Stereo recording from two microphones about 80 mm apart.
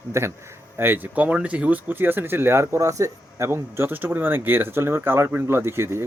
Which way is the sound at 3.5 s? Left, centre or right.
Right.